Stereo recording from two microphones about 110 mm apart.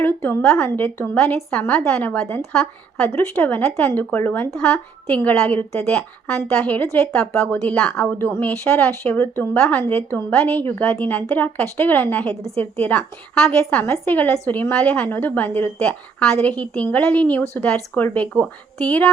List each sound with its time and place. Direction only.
0.0 s a woman's voice: 20° left (ahead or behind)
1.1 s a woman's voice: 10° left (ahead or behind)
13.6 s a woman's voice: 15° left (ahead or behind)